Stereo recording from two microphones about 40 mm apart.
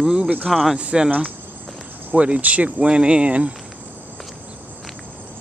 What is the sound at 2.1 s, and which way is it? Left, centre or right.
Speech, right.